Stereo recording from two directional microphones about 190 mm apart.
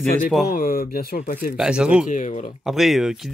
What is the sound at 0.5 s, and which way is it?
Speech, 50° left (ahead or behind).